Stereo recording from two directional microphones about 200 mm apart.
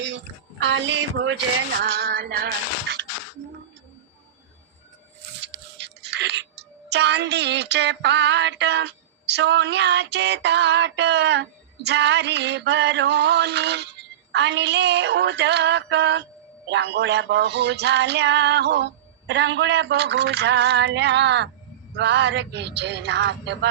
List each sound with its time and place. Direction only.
0.6 s speech: 65° right (ahead or behind)
1.8 s music: 50° right (ahead or behind)
5.4 s a sound: 60° right (ahead or behind)